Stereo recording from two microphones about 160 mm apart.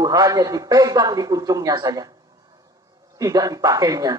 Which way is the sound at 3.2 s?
20° right (ahead or behind).